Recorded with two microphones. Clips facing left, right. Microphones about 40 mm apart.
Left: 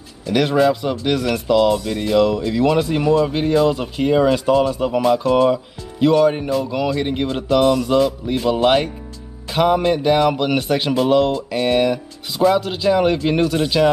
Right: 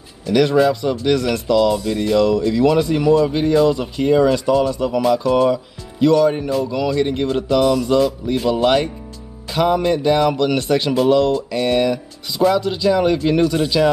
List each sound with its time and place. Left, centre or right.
0.3 s speech: centre
12.5 s speech: left